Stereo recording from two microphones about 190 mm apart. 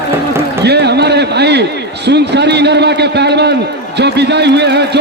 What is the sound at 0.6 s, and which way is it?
A man's voice, 60° right (ahead or behind).